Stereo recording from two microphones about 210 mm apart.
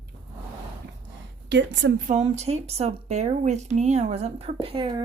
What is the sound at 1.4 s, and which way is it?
Speech, 55° right (ahead or behind).